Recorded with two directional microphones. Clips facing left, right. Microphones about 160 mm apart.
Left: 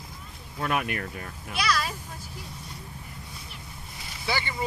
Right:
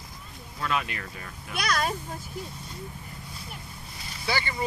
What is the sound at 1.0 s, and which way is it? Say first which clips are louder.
Speech: left 4 dB; 40° left (ahead or behind).